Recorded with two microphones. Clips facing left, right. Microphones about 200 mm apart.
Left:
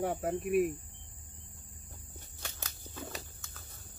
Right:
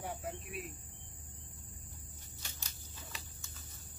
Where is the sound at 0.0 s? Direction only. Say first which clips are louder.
Left 10 dB; 60° left (ahead or behind).